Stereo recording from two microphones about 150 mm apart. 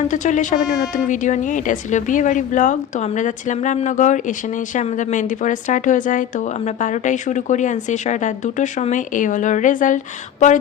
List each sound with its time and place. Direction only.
0.1 s a woman's voice: 55° left (ahead or behind)